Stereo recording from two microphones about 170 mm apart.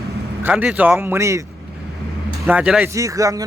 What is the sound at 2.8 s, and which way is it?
Speech, 20° right (ahead or behind).